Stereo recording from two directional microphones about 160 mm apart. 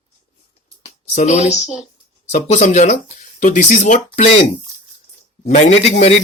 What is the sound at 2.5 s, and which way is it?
Speech, 45° left (ahead or behind).